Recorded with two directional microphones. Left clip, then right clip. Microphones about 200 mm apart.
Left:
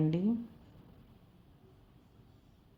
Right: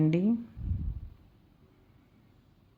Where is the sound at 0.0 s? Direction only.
20° right (ahead or behind).